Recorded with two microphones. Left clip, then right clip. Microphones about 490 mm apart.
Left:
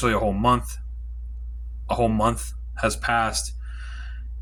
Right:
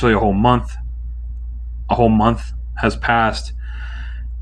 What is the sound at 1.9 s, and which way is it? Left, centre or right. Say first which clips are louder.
Speech: right 7 dB; left.